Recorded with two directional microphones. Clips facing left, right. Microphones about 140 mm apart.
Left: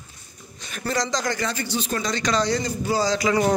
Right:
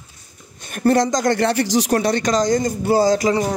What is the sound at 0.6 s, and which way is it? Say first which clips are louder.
A man's voice: right 10 dB; 55° right (ahead or behind).